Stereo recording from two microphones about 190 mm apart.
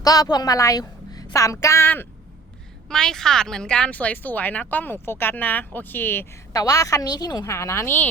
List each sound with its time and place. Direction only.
0.0 s a woman's voice: 20° left (ahead or behind)